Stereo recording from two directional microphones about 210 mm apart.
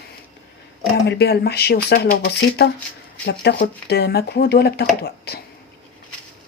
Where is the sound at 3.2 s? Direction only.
50° left (ahead or behind).